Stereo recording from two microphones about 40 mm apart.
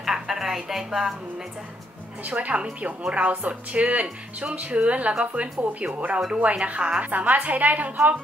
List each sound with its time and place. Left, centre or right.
0.0 s music: centre
0.8 s a woman's voice: centre
2.2 s speech: right
7.0 s speech: right